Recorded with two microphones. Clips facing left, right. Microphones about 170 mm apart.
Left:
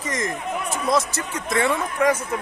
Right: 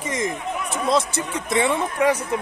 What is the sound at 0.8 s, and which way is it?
Speech, 25° right (ahead or behind).